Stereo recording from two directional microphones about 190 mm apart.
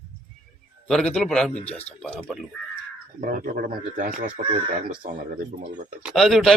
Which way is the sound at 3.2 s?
45° right (ahead or behind).